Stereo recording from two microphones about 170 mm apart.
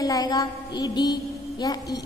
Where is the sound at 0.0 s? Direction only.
20° left (ahead or behind).